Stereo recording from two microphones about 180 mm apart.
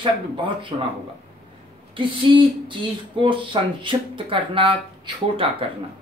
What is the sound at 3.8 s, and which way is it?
Speech, 30° right (ahead or behind).